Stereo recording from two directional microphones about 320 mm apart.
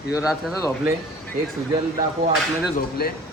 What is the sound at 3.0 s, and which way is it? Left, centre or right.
Speech, left.